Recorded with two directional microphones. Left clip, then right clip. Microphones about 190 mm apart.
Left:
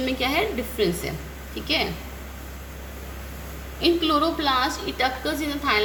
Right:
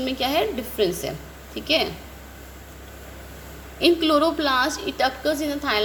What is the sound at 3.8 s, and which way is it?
A woman's voice, 40° right (ahead or behind).